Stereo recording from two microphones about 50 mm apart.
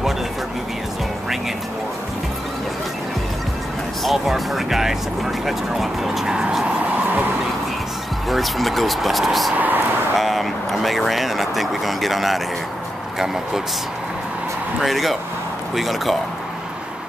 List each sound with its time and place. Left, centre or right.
4.0 s speech: centre
8.3 s speech: centre
9.6 s speech: right
10.1 s speech: centre
14.8 s speech: centre